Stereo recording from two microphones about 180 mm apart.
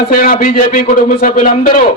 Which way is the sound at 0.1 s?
50° left (ahead or behind).